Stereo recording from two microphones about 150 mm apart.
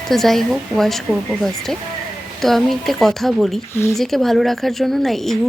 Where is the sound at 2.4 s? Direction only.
Centre (ahead or behind).